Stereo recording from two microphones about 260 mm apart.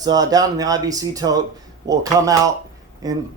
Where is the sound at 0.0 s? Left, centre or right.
Centre.